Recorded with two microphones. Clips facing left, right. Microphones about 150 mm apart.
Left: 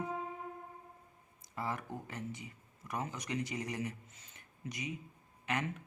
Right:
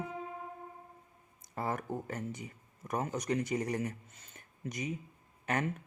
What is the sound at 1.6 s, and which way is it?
Speech, 45° right (ahead or behind).